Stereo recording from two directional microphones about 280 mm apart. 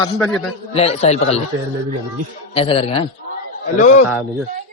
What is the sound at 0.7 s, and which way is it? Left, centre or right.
Speech, left.